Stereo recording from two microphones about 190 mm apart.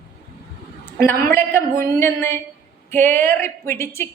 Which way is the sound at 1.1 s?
10° left (ahead or behind).